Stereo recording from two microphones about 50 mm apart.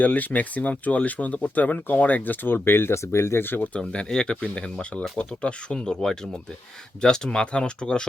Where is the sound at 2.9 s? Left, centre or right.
Left.